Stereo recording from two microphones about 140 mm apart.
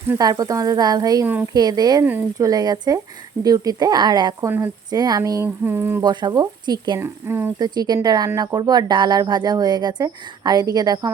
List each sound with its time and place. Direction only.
0.2 s speech: 25° right (ahead or behind)
2.0 s speech: 15° right (ahead or behind)
2.5 s speech: 30° right (ahead or behind)
4.4 s speech: 15° right (ahead or behind)
4.9 s speech: 30° right (ahead or behind)
6.0 s speech: 30° right (ahead or behind)
7.0 s speech: 15° right (ahead or behind)
7.6 s speech: 30° right (ahead or behind)